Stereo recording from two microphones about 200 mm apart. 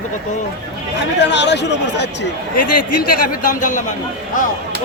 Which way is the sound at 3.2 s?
40° left (ahead or behind).